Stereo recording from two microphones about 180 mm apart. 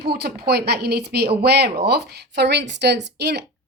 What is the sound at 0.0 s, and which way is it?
A woman's voice, 65° right (ahead or behind).